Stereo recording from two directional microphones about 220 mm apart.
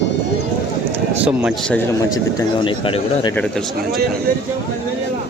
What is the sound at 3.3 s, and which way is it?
Speech, 5° left (ahead or behind).